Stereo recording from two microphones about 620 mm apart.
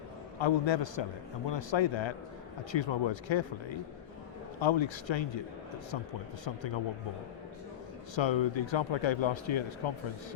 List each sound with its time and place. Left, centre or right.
0.3 s speech: left
4.6 s speech: left
6.4 s speech: left
8.1 s speech: left